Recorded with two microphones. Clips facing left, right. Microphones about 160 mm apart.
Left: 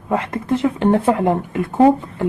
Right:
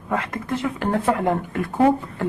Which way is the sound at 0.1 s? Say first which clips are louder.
Left 5 dB; 25° left (ahead or behind).